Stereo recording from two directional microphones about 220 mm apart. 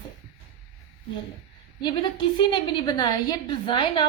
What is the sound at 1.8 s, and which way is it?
A woman's voice, 20° left (ahead or behind).